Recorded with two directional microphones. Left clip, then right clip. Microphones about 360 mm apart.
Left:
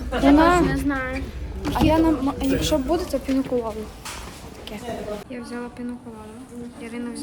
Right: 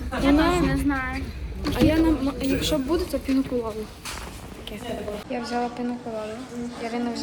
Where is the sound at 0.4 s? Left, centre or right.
Left.